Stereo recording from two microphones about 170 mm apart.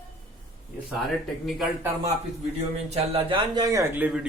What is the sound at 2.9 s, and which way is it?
Speech, 35° right (ahead or behind).